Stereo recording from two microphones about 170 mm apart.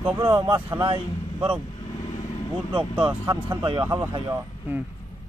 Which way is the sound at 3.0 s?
25° right (ahead or behind).